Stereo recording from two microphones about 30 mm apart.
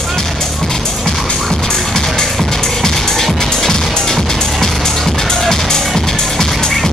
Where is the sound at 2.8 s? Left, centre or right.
Centre.